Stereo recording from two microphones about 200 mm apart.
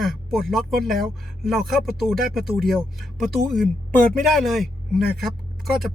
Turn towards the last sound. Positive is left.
turn(degrees=0)  # may be behind; listen again after turning